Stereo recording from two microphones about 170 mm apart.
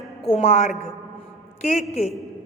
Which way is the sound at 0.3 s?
35° left (ahead or behind).